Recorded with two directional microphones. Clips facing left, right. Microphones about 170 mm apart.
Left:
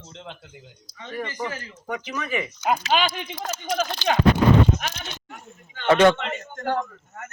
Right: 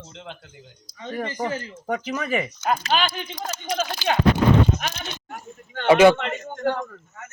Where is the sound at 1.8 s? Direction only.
45° right (ahead or behind).